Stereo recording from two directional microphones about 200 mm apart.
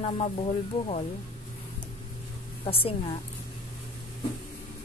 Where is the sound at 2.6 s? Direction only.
30° left (ahead or behind).